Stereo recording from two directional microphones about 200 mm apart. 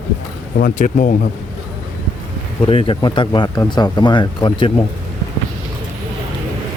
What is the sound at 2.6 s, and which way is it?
Speech, 25° left (ahead or behind).